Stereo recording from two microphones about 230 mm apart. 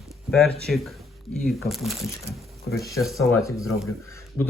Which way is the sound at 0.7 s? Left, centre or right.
Centre.